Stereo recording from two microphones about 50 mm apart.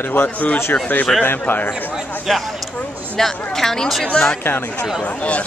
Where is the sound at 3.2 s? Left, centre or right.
Centre.